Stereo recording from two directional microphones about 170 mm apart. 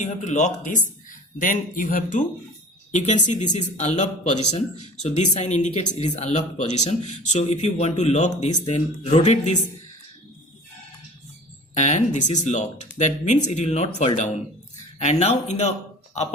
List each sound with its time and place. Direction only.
0.0 s speech: 45° left (ahead or behind)
11.7 s speech: 45° left (ahead or behind)